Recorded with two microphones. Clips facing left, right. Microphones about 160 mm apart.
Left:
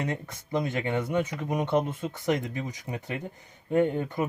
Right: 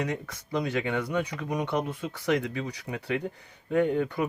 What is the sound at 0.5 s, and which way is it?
Speech, 20° left (ahead or behind).